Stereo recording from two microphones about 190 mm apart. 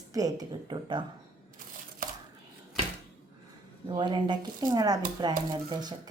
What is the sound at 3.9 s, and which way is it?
Speech, 25° right (ahead or behind).